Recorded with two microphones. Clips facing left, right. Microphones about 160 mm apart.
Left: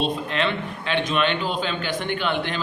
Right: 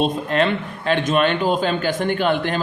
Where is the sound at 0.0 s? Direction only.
45° right (ahead or behind).